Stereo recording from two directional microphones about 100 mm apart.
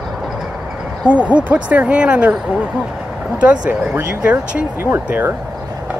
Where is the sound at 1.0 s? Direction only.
15° right (ahead or behind).